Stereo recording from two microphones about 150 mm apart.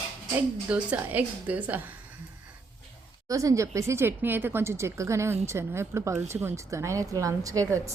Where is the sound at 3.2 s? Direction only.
20° right (ahead or behind).